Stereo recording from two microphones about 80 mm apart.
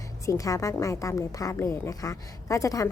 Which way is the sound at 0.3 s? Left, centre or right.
Left.